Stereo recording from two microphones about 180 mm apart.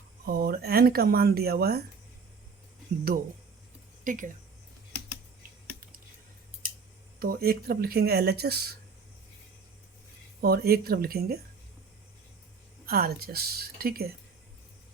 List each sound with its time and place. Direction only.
0.3 s speech: 55° right (ahead or behind)
3.1 s speech: 55° right (ahead or behind)
7.2 s speech: 55° right (ahead or behind)
10.4 s speech: 60° right (ahead or behind)
12.8 s speech: 55° right (ahead or behind)